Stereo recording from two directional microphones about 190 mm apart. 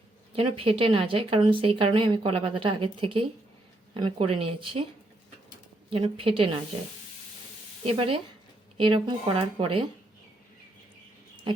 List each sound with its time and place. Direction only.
0.3 s speech: 30° right (ahead or behind)
5.9 s speech: 30° right (ahead or behind)
7.9 s speech: 30° right (ahead or behind)